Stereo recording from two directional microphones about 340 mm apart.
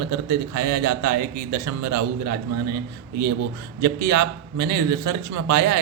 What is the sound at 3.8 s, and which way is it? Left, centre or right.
A man's voice, right.